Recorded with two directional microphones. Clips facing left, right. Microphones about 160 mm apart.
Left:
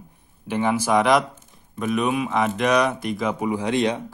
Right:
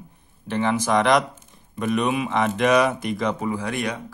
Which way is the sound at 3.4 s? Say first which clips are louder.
Left 4 dB; 20° left (ahead or behind).